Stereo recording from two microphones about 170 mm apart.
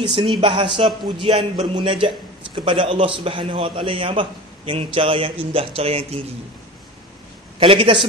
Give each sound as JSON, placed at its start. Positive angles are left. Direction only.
{"t": 0.0, "sound": "a man's voice", "side_deg": -30}
{"t": 7.5, "sound": "a man's voice", "side_deg": -30}